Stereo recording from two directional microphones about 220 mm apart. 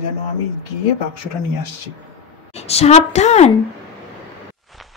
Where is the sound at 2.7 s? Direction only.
30° left (ahead or behind).